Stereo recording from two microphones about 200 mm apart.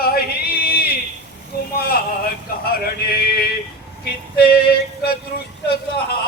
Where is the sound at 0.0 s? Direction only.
50° left (ahead or behind).